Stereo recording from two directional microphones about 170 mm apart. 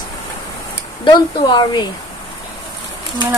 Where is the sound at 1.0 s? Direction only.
25° left (ahead or behind).